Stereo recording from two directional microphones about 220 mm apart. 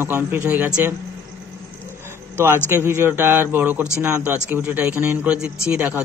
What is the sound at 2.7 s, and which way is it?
A man's voice, 10° right (ahead or behind).